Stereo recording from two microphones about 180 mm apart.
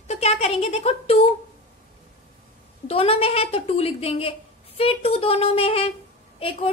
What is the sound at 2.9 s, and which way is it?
A woman's voice, 30° left (ahead or behind).